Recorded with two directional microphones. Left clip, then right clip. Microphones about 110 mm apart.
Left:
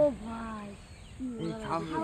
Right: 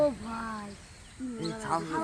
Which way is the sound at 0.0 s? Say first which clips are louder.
Even; 85° right.